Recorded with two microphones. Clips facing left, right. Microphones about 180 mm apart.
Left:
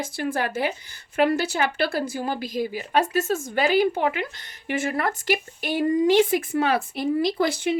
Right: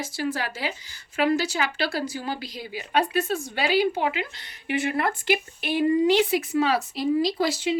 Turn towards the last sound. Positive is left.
turn(degrees=55)  # may be behind; listen again after turning